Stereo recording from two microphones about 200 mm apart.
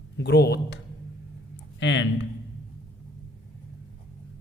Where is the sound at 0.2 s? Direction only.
55° left (ahead or behind).